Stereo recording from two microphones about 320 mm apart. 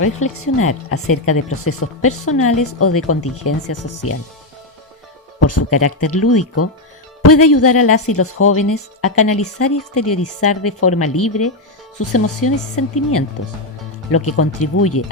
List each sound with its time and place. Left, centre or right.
0.0 s a woman's voice: left
5.4 s a woman's voice: left